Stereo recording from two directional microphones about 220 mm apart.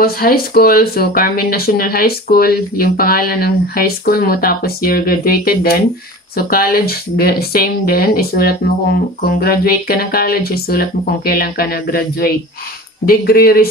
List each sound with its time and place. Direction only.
0.0 s speech: 45° left (ahead or behind)